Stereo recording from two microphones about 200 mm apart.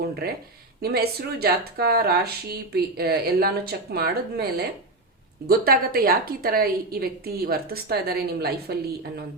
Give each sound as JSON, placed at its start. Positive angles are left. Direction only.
{"t": 0.0, "sound": "a woman's voice", "side_deg": -50}